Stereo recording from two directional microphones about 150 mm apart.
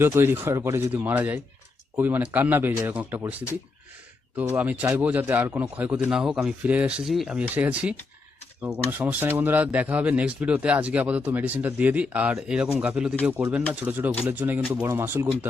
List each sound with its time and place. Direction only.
0.0 s speech: 15° right (ahead or behind)
4.4 s speech: 10° right (ahead or behind)